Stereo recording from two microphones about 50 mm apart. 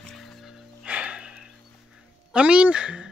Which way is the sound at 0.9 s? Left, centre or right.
Right.